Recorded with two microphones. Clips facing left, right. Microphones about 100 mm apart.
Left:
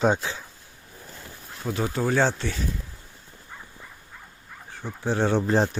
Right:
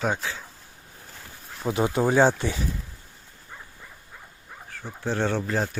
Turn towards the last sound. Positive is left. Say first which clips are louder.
# left 5 dB
turn(degrees=30)  # may be behind; listen again after turning